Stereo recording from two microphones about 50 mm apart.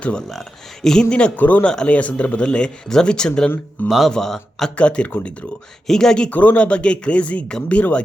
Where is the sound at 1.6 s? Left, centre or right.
Centre.